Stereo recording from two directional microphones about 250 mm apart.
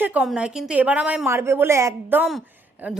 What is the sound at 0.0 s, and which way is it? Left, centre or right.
A woman's voice, centre.